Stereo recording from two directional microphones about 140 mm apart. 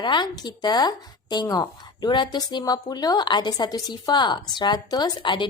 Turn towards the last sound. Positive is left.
turn(degrees=35)  # may be behind; listen again after turning